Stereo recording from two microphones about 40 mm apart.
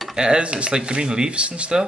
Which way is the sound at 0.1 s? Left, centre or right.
Right.